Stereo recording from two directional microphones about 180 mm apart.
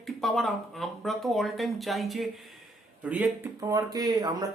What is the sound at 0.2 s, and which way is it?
Speech, centre (ahead or behind).